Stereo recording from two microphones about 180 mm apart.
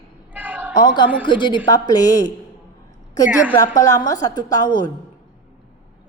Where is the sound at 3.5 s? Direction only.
20° left (ahead or behind).